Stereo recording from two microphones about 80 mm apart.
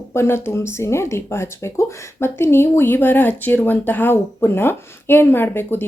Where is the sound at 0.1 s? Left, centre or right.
Left.